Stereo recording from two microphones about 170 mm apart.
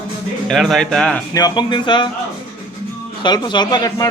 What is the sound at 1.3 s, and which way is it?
Speech, 25° left (ahead or behind).